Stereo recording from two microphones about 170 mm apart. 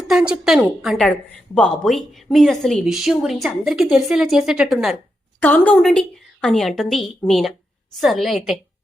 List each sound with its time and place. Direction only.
0.1 s a woman's voice: 5° right (ahead or behind)